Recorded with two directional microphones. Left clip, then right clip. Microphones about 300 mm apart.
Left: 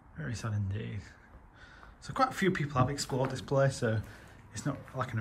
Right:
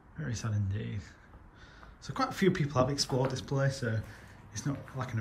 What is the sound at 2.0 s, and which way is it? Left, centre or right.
A man's voice, centre.